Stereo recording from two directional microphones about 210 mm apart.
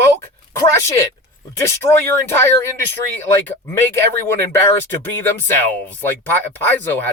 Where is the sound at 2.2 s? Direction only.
10° left (ahead or behind).